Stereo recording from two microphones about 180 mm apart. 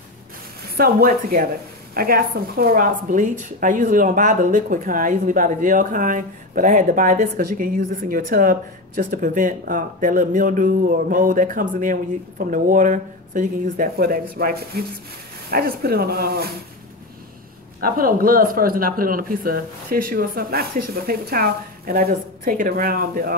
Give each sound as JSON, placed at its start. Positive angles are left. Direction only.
{"t": 0.7, "sound": "speech", "side_deg": -55}
{"t": 17.7, "sound": "speech", "side_deg": -55}